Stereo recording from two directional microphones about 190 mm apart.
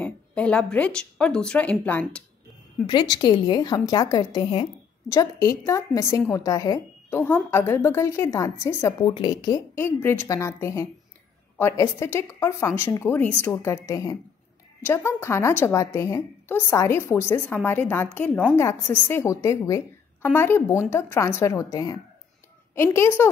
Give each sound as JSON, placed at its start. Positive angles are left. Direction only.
{"t": 0.0, "sound": "a woman's voice", "side_deg": 5}
{"t": 2.9, "sound": "a woman's voice", "side_deg": 25}